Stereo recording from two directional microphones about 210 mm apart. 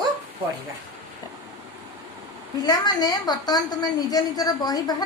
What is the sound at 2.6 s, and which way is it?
A woman's voice, 20° left (ahead or behind).